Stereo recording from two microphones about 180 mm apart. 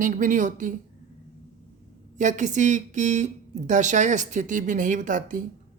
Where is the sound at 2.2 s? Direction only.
45° right (ahead or behind).